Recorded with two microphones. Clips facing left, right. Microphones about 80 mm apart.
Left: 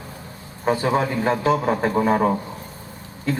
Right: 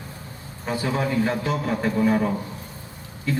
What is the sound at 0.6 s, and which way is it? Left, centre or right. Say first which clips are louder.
A man's voice: left 5 dB; left.